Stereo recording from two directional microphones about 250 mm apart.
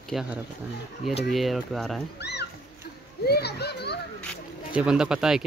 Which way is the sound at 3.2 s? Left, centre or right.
Left.